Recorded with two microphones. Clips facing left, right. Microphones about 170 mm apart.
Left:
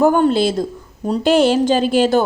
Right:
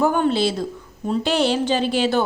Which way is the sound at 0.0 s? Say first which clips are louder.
Left 5 dB; 45° left (ahead or behind).